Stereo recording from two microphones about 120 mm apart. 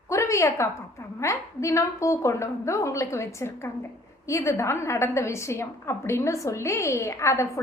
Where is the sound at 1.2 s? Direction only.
25° left (ahead or behind).